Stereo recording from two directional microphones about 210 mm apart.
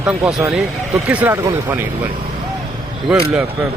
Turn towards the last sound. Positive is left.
turn(degrees=-5)  # may be behind; listen again after turning